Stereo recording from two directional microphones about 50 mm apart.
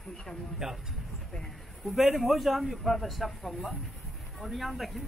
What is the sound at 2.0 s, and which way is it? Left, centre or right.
A man's voice, centre.